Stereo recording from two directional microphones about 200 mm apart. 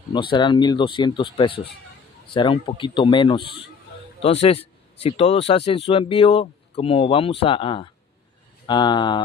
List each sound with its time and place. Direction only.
0.1 s speech: 25° left (ahead or behind)